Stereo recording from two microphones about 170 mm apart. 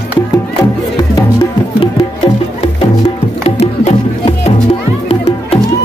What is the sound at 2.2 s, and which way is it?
Music, 30° left (ahead or behind).